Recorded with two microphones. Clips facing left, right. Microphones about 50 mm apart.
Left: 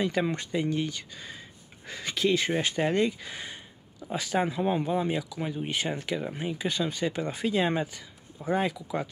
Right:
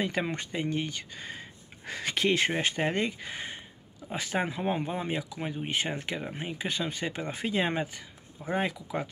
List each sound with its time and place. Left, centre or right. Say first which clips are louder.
0.2 s speech: left 3 dB; centre; by 1.4 s right
1.9 s speech: left 1 dB; right
2.7 s speech: left 3 dB; right